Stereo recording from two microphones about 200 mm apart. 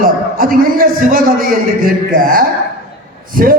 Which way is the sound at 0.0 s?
45° right (ahead or behind).